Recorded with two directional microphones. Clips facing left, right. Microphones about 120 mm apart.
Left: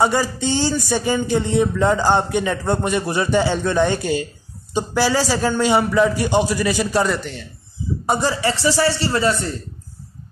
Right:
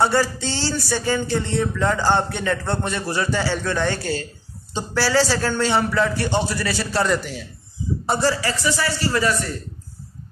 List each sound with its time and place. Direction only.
0.0 s speech: 15° left (ahead or behind)
7.1 s a man's voice: 5° right (ahead or behind)
8.1 s a man's voice: 20° left (ahead or behind)